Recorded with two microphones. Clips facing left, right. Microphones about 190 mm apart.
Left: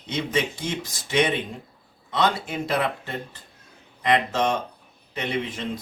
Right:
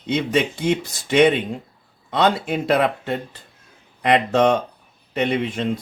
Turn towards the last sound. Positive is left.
turn(degrees=-60)  # may be behind; listen again after turning